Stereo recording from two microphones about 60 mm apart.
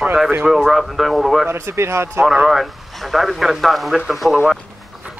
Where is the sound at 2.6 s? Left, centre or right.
Centre.